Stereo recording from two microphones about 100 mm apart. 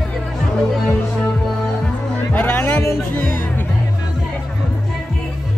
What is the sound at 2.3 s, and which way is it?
Music, 20° left (ahead or behind).